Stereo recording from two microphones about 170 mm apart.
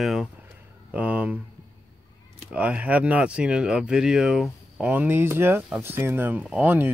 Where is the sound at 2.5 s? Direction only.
5° right (ahead or behind).